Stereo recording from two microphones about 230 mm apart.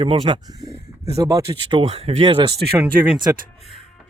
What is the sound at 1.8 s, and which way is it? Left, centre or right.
Speech, right.